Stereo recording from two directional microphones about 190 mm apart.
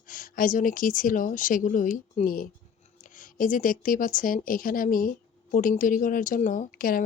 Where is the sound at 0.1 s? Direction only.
45° left (ahead or behind).